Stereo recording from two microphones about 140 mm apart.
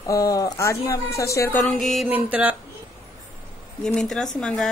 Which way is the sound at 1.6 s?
Centre (ahead or behind).